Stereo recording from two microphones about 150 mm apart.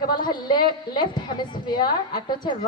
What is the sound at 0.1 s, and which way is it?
A woman's voice, 30° left (ahead or behind).